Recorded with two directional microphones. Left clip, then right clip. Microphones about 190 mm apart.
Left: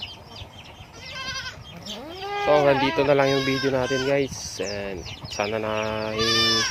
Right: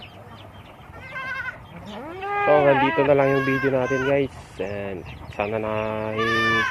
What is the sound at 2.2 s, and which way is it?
Livestock, 15° left (ahead or behind).